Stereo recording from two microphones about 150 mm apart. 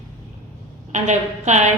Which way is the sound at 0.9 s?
50° right (ahead or behind).